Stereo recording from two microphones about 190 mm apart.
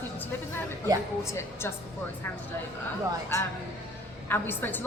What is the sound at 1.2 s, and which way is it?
Speech, 15° left (ahead or behind).